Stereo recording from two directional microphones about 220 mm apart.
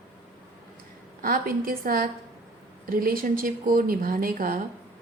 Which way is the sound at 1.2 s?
40° right (ahead or behind).